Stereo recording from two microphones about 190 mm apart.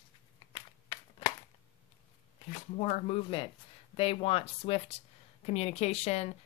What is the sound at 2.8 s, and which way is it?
Speech, 35° left (ahead or behind).